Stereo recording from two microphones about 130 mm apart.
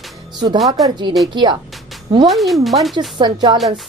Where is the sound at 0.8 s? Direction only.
Centre (ahead or behind).